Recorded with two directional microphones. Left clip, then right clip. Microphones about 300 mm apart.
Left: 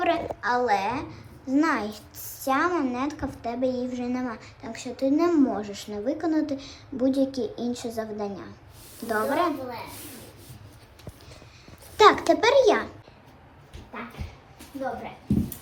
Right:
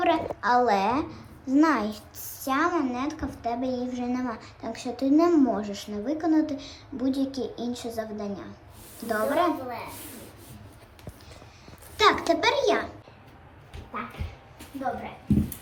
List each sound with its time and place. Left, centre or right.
0.0 s a sound: centre
1.5 s speech: centre
4.6 s speech: centre
11.9 s speech: centre